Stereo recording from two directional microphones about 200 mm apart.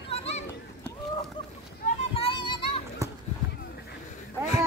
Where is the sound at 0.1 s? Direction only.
30° left (ahead or behind).